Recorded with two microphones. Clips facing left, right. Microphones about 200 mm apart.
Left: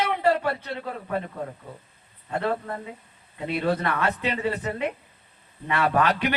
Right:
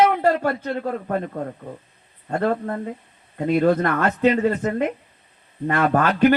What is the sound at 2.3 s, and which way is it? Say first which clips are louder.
A man's voice: right 5 dB; 45° right (ahead or behind).